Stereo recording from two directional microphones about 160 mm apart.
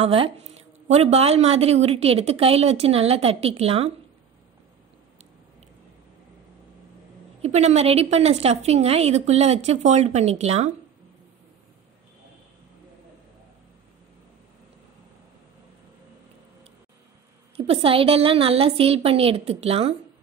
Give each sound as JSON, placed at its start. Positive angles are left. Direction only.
{"t": 0.0, "sound": "a woman's voice", "side_deg": -40}
{"t": 7.4, "sound": "a woman's voice", "side_deg": -45}
{"t": 17.6, "sound": "a woman's voice", "side_deg": -35}